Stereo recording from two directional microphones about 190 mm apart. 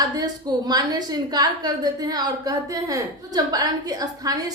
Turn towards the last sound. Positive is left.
turn(degrees=-20)  # may be behind; listen again after turning